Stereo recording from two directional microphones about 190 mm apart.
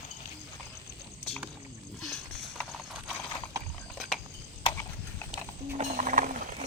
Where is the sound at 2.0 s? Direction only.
Centre (ahead or behind).